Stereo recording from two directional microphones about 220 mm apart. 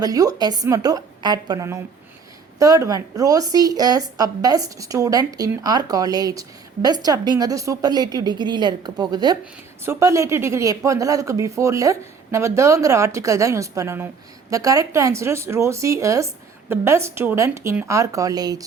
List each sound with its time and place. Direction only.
0.0 s speech: 15° right (ahead or behind)